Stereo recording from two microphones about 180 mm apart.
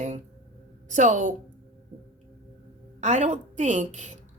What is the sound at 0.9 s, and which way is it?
Speech, 40° right (ahead or behind).